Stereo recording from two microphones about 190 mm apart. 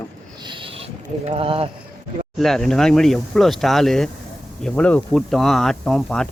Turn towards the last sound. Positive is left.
turn(degrees=5)  # may be behind; listen again after turning